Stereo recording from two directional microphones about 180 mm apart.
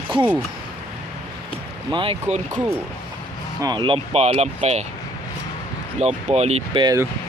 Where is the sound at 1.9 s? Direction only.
30° right (ahead or behind).